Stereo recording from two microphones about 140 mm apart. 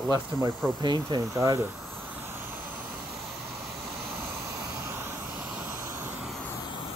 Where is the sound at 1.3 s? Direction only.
20° right (ahead or behind).